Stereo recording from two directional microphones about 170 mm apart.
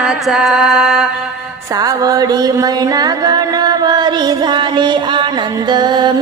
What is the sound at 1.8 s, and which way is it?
Music, 20° right (ahead or behind).